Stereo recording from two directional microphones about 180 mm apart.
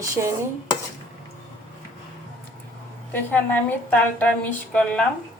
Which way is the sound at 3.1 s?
10° left (ahead or behind).